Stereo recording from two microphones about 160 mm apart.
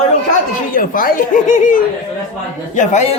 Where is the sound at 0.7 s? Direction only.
60° left (ahead or behind).